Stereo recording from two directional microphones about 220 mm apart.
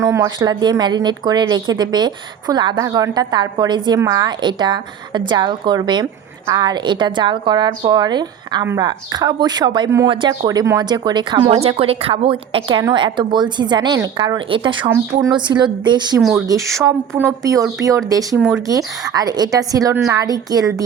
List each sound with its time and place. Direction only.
0.0 s a woman's voice: 15° right (ahead or behind)